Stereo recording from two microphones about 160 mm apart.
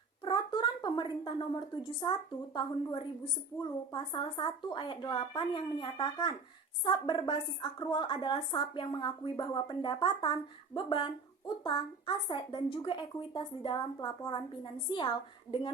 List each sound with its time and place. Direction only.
0.3 s a woman's voice: 30° left (ahead or behind)
15.5 s a woman's voice: 15° left (ahead or behind)